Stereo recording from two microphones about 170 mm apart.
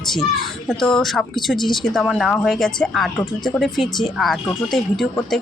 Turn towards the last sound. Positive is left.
turn(degrees=0)  # may be behind; listen again after turning